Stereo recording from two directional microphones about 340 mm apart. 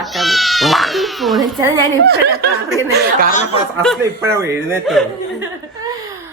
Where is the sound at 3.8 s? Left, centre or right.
Centre.